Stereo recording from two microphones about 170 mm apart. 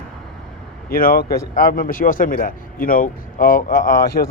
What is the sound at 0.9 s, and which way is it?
A man's voice, 60° left (ahead or behind).